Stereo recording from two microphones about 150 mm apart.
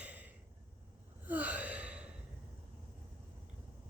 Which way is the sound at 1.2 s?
10° right (ahead or behind).